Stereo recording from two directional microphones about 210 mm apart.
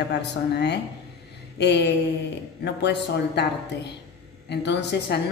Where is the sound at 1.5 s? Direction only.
55° left (ahead or behind).